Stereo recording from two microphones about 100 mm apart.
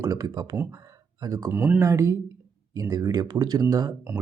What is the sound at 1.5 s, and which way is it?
Speech, 20° right (ahead or behind).